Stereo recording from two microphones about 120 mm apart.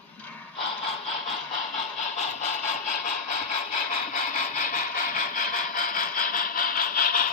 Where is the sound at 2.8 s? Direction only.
90° left.